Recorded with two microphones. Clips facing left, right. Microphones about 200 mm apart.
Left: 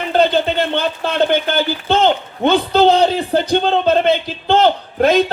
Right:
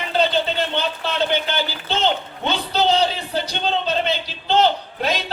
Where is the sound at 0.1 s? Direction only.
55° left (ahead or behind).